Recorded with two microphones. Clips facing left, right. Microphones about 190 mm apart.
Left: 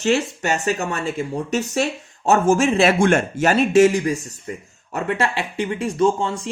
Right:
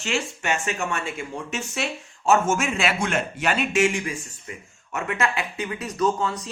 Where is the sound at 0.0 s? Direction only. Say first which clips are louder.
Left 8 dB; 40° left (ahead or behind).